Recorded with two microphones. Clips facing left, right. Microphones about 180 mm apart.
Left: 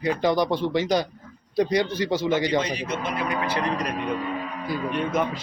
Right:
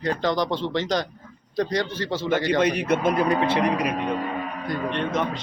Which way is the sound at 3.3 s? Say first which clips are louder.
Right 5 dB; 30° right (ahead or behind).